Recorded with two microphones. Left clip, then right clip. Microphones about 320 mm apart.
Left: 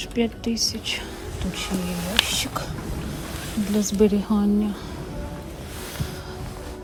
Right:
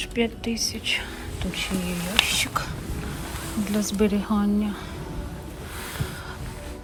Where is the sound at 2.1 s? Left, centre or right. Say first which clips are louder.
Right 1 dB; centre.